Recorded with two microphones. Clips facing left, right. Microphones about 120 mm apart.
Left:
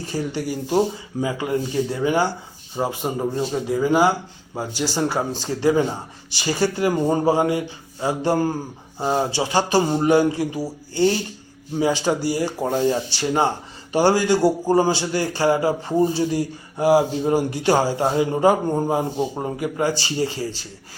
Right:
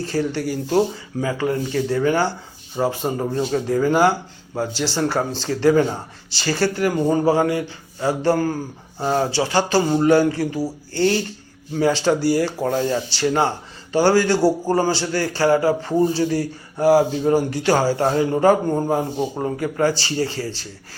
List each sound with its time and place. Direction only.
0.1 s speech: 15° left (ahead or behind)
11.7 s speech: 15° left (ahead or behind)